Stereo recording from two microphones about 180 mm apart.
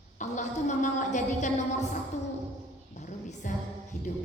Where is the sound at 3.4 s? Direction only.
45° left (ahead or behind).